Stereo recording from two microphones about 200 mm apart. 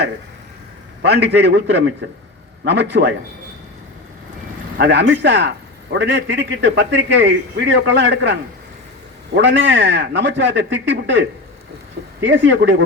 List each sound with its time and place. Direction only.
1.0 s a man's voice: 55° right (ahead or behind)
4.8 s a man's voice: 60° right (ahead or behind)